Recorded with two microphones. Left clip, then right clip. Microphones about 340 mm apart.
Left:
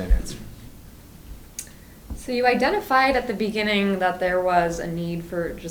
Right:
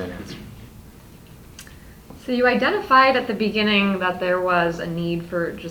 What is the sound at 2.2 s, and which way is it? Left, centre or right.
A woman's voice, left.